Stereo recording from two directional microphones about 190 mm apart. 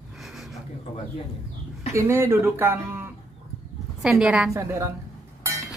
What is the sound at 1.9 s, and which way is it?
Speech, 15° right (ahead or behind).